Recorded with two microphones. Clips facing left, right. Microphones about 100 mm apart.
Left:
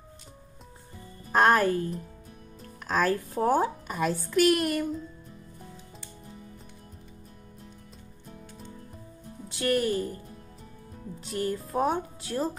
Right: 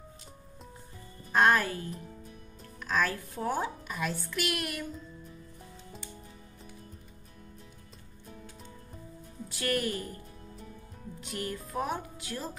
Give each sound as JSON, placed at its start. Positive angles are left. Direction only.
{"t": 1.3, "sound": "a woman's voice", "side_deg": 45}
{"t": 9.5, "sound": "a woman's voice", "side_deg": 25}